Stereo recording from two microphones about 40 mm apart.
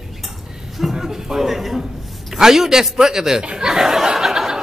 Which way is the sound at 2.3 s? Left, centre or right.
Centre.